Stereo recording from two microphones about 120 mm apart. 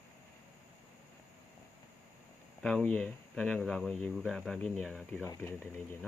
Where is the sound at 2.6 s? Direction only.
10° left (ahead or behind).